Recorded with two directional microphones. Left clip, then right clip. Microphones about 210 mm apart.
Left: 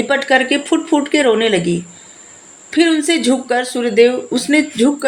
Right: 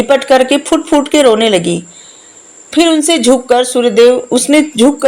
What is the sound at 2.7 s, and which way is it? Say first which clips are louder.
A woman's voice: right 4 dB; 30° right (ahead or behind).